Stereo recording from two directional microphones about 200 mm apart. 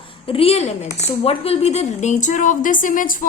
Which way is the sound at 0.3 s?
30° left (ahead or behind).